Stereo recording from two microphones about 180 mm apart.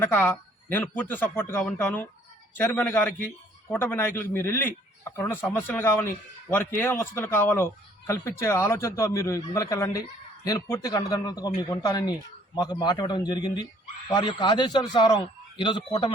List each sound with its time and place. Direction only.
0.0 s speech: 10° left (ahead or behind)